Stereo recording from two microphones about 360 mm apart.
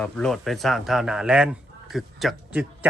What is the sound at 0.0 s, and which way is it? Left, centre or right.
Speech, centre.